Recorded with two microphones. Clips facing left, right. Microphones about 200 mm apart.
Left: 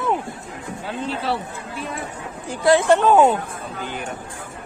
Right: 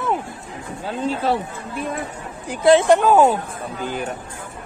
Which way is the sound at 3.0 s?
10° right (ahead or behind).